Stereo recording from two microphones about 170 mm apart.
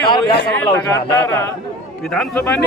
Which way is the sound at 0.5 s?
10° left (ahead or behind).